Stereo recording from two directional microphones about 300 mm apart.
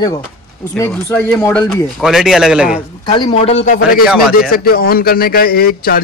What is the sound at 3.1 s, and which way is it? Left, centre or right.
A man's voice, centre.